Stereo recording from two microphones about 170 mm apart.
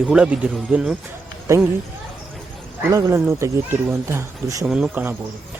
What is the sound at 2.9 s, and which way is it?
Speech, 15° right (ahead or behind).